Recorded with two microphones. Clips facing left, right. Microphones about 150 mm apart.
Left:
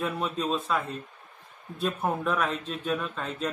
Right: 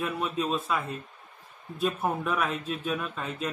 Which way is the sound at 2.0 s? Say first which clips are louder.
Left 1 dB; 5° right (ahead or behind).